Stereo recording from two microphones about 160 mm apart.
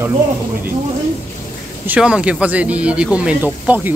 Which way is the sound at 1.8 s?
10° right (ahead or behind).